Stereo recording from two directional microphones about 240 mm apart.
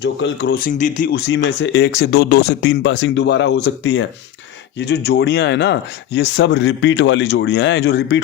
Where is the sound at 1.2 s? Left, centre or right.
Left.